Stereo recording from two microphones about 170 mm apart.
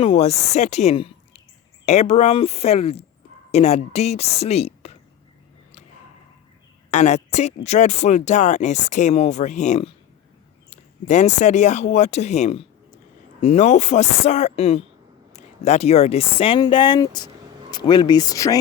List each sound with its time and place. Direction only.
0.0 s a woman's voice: 35° left (ahead or behind)
6.9 s a woman's voice: 40° left (ahead or behind); by 18.5 s 20° left (ahead or behind)